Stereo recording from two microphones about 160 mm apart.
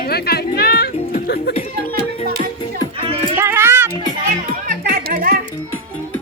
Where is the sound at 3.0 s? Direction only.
35° right (ahead or behind).